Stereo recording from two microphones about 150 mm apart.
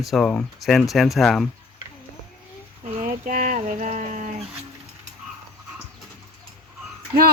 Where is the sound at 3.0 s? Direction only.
60° right (ahead or behind).